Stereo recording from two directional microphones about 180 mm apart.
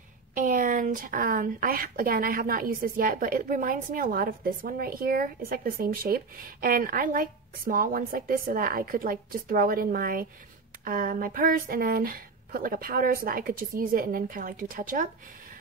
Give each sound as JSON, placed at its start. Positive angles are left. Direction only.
{"t": 0.3, "sound": "speech", "side_deg": -50}